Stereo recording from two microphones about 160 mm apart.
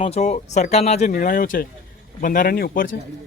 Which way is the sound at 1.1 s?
60° left (ahead or behind).